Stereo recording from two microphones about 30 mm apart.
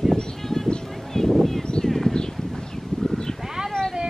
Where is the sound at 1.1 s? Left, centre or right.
Left.